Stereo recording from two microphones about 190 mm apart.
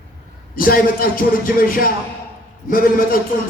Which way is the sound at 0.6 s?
50° left (ahead or behind).